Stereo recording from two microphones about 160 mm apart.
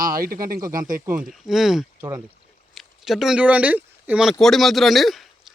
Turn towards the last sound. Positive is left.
turn(degrees=0)  # may be behind; listen again after turning